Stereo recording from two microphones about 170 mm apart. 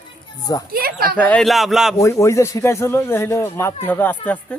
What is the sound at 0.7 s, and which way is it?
Speech, 60° right (ahead or behind).